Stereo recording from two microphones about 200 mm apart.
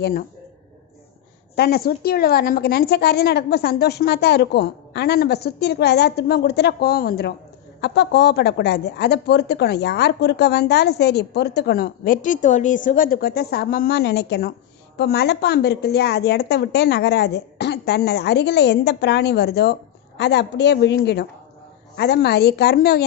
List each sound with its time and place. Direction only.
0.0 s a woman's voice: 50° left (ahead or behind)
1.5 s a woman's voice: 55° left (ahead or behind)